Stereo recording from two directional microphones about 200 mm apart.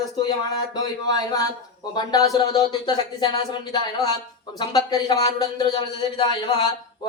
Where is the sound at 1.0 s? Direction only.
20° left (ahead or behind).